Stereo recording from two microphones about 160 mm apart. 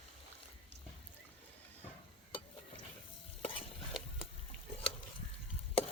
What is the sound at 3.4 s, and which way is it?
Stir, 35° left (ahead or behind).